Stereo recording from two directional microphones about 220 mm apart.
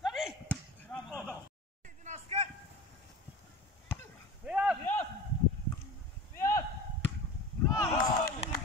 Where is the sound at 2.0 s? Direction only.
30° right (ahead or behind).